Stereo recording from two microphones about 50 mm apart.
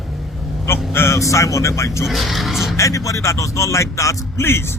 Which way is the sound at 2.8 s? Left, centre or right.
Left.